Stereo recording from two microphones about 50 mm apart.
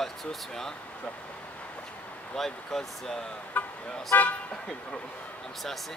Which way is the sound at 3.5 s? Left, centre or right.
Left.